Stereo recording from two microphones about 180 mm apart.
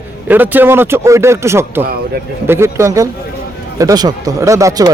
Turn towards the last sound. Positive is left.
turn(degrees=-20)  # may be behind; listen again after turning